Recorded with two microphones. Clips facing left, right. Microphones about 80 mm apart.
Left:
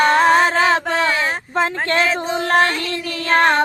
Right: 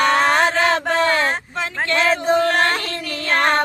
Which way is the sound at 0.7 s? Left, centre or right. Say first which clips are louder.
Even; right.